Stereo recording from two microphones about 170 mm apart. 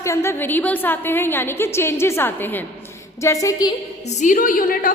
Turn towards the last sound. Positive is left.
turn(degrees=55)  # may be behind; listen again after turning